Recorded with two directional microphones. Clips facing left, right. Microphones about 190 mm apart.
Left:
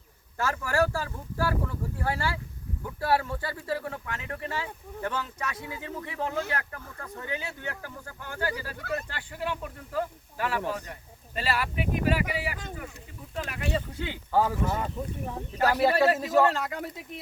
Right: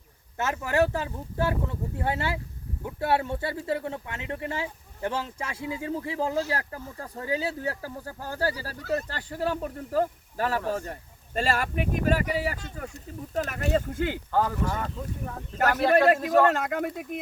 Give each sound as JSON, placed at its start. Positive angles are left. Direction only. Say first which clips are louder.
{"t": 0.3, "sound": "speech", "louder": "right 2 dB", "side_deg": -20}
{"t": 14.3, "sound": "a man's voice", "louder": "left 2 dB", "side_deg": 5}
{"t": 14.8, "sound": "speech", "louder": "left 1 dB", "side_deg": 15}
{"t": 15.8, "sound": "a man's voice", "louder": "right 4 dB", "side_deg": 5}
{"t": 16.5, "sound": "speech", "louder": "right 5 dB", "side_deg": -50}